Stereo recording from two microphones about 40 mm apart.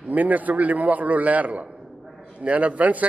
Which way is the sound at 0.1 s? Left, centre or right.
Right.